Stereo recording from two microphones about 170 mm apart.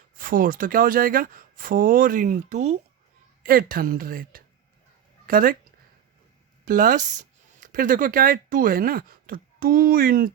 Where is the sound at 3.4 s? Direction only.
60° right (ahead or behind).